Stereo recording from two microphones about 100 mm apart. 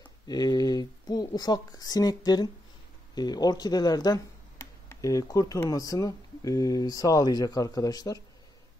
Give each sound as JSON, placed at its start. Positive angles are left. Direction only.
{"t": 0.3, "sound": "speech", "side_deg": 40}